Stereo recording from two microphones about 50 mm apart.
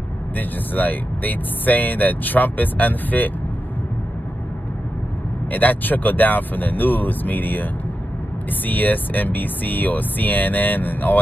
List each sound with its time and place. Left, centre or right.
0.4 s speech: left
5.5 s speech: left
8.6 s speech: left